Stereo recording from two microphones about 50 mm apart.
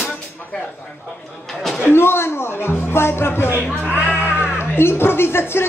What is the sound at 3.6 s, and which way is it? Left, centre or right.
Speech, right.